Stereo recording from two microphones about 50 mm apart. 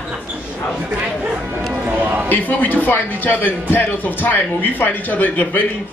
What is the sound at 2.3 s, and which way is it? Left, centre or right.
A man's voice, left.